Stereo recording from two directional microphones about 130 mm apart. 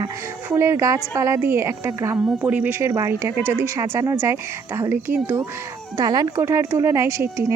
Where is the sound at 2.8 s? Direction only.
25° right (ahead or behind).